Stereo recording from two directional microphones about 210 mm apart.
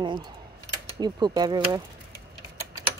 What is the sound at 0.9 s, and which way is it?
Speech, 20° right (ahead or behind).